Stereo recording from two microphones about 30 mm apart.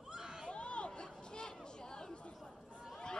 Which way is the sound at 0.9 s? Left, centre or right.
Left.